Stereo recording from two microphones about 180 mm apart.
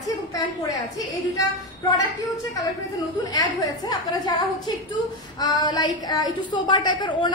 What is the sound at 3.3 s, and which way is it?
A woman's voice, 20° left (ahead or behind).